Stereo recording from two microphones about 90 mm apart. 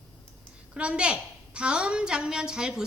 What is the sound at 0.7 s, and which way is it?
A woman's voice, 10° right (ahead or behind).